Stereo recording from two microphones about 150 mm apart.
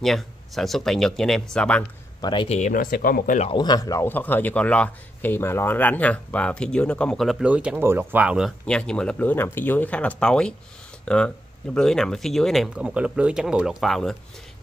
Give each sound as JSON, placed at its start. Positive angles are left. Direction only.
{"t": 0.0, "sound": "speech", "side_deg": 0}
{"t": 2.4, "sound": "speech", "side_deg": 50}
{"t": 3.4, "sound": "a man's voice", "side_deg": 30}
{"t": 8.6, "sound": "a man's voice", "side_deg": 5}